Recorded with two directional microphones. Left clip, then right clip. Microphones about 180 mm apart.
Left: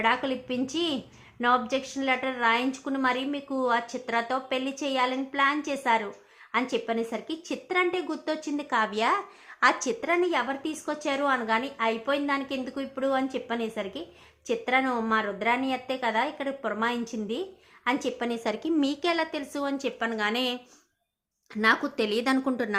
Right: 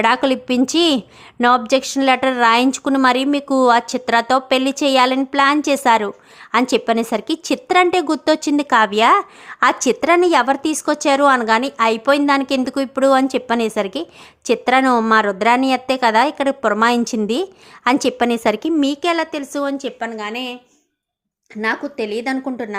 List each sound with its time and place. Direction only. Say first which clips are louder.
0.0 s a woman's voice: right 10 dB; 65° right (ahead or behind); by 20.1 s 30° right (ahead or behind)
20.1 s a woman's voice: right 2 dB; 5° right (ahead or behind)
21.5 s a woman's voice: right 3 dB; 15° right (ahead or behind)